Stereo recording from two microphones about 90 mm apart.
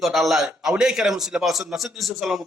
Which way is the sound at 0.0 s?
Centre (ahead or behind).